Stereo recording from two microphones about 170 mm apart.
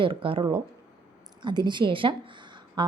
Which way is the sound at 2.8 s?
25° right (ahead or behind).